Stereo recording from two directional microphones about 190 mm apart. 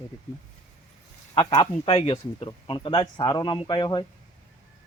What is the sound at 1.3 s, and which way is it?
Speech, 20° left (ahead or behind).